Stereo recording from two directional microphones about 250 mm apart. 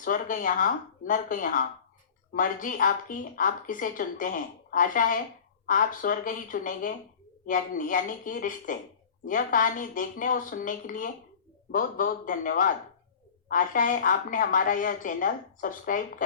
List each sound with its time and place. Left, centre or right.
0.0 s speech: left